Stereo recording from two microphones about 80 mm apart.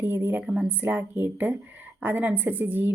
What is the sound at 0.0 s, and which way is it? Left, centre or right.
A woman's voice, right.